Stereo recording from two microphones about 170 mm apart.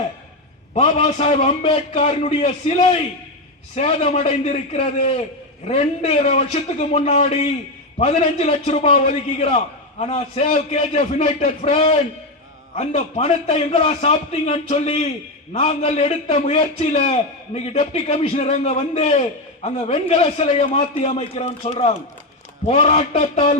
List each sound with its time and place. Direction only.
0.7 s a man's voice: 35° left (ahead or behind)